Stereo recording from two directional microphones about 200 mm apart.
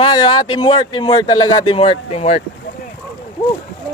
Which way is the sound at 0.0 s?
20° left (ahead or behind).